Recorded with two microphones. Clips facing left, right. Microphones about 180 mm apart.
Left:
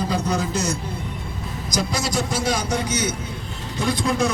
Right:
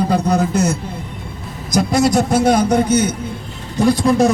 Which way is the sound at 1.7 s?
55° right (ahead or behind).